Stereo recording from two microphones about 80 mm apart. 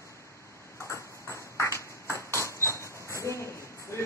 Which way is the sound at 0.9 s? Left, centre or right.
Left.